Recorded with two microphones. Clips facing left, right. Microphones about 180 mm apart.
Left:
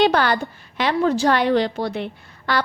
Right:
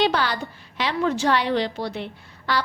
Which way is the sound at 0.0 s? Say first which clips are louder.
Left 5 dB; 50° left (ahead or behind).